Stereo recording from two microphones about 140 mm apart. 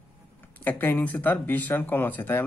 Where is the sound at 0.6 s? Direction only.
15° left (ahead or behind).